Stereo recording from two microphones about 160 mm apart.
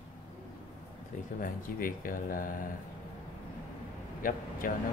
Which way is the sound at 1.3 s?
60° left (ahead or behind).